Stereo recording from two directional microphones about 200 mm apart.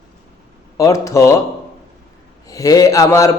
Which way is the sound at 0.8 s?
15° left (ahead or behind).